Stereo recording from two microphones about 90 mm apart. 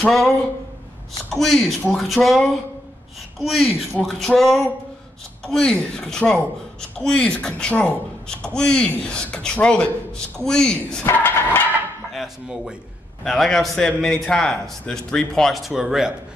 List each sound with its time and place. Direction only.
0.0 s a man's voice: 5° left (ahead or behind)
1.3 s a man's voice: centre (ahead or behind)
11.1 s music: 20° left (ahead or behind)
12.1 s a man's voice: 5° right (ahead or behind)